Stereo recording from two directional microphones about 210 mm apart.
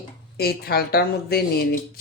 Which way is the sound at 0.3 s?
45° left (ahead or behind).